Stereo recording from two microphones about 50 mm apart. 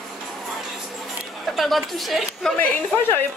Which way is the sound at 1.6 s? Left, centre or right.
Centre.